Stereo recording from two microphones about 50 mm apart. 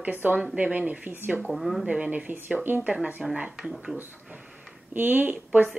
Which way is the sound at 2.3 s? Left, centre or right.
Right.